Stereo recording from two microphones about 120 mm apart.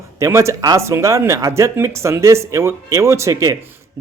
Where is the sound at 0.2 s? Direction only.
25° right (ahead or behind).